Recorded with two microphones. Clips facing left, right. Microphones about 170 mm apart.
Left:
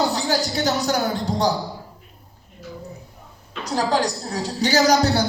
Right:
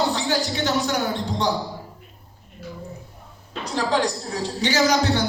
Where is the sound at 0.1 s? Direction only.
40° left (ahead or behind).